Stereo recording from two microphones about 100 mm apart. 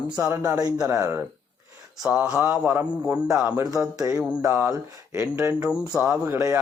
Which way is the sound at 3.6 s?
35° right (ahead or behind).